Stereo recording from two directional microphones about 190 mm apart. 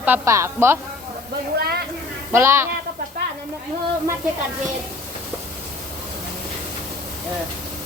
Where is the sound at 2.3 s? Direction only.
15° right (ahead or behind).